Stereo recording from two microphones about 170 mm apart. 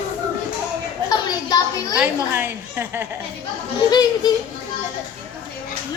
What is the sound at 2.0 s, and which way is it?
A woman's voice, 10° right (ahead or behind).